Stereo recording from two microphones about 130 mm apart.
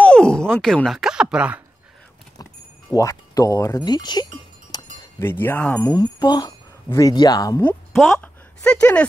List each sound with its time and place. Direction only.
0.0 s a sound: 5° left (ahead or behind); by 1.6 s 10° right (ahead or behind)
3.0 s speech: 25° left (ahead or behind)
5.2 s speech: 15° left (ahead or behind)
5.9 s wind chime: 35° left (ahead or behind)
6.9 s speech: 25° left (ahead or behind)
7.9 s speech: centre (ahead or behind)
8.2 s a sound: 10° left (ahead or behind)